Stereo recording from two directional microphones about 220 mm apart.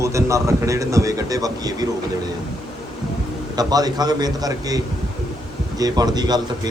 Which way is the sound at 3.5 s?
15° right (ahead or behind).